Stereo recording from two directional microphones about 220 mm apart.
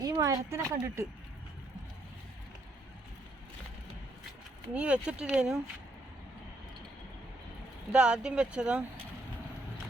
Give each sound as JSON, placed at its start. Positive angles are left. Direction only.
{"t": 0.0, "sound": "speech", "side_deg": -15}
{"t": 4.7, "sound": "speech", "side_deg": -5}
{"t": 7.9, "sound": "speech", "side_deg": -5}